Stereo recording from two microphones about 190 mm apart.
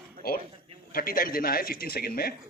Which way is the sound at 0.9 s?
50° left (ahead or behind).